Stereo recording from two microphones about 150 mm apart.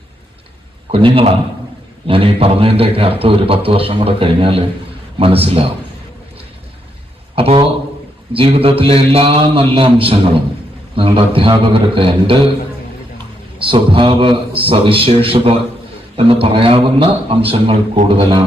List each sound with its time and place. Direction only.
0.9 s a man's voice: 35° right (ahead or behind)
7.3 s a man's voice: 40° right (ahead or behind)